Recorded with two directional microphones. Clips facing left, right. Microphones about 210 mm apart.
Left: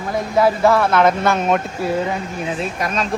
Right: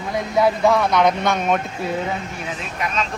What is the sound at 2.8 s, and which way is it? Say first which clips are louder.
Speech: right 2 dB; 45° left (ahead or behind).